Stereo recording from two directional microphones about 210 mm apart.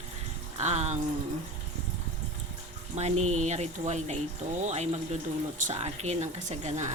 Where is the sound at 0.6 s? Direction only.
35° right (ahead or behind).